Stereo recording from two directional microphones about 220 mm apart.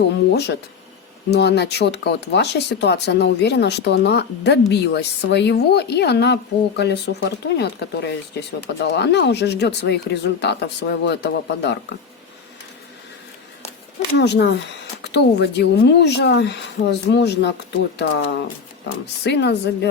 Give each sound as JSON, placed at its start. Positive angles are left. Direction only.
{"t": 0.3, "sound": "a woman's voice", "side_deg": 50}
{"t": 14.2, "sound": "a woman's voice", "side_deg": 50}